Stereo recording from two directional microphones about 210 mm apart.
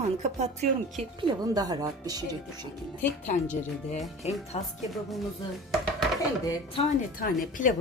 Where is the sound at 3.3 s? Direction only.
35° left (ahead or behind).